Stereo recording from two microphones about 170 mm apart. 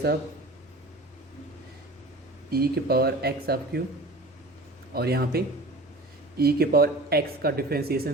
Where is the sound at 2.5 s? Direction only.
65° right (ahead or behind).